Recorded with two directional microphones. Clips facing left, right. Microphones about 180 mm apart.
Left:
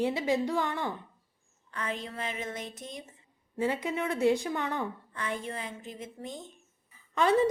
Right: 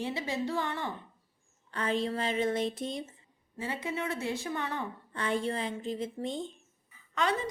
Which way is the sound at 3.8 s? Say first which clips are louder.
Left 5 dB; 15° left (ahead or behind).